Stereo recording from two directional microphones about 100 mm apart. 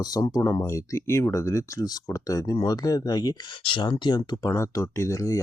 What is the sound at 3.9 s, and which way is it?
Speech, 45° left (ahead or behind).